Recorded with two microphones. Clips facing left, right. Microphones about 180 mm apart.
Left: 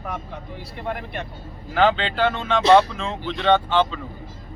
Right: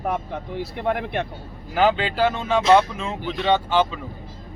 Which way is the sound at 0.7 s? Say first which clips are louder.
Right 5 dB; 65° right (ahead or behind).